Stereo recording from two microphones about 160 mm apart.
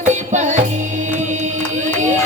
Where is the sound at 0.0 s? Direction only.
50° right (ahead or behind).